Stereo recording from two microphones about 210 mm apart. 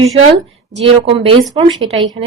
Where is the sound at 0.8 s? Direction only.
25° right (ahead or behind).